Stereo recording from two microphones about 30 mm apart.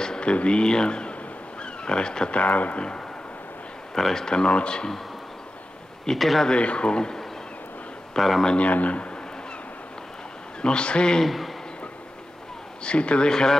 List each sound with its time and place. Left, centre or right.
0.2 s speech: left
1.6 s a sound: left
2.3 s speech: left
3.9 s speech: centre
4.4 s speech: left
6.1 s speech: centre
6.5 s speech: left
8.2 s speech: centre
8.5 s speech: left
10.6 s speech: left
11.2 s speech: centre
12.8 s speech: left
13.3 s speech: left